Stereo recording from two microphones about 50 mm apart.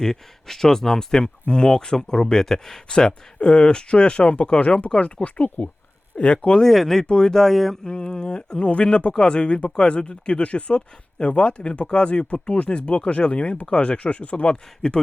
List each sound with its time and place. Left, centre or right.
0.0 s speech: centre
6.7 s speech: centre
7.9 s speech: centre